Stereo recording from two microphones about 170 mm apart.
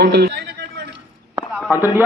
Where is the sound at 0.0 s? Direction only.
75° right (ahead or behind).